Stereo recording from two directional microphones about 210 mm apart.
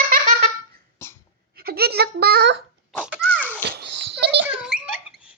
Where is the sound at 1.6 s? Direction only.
45° right (ahead or behind).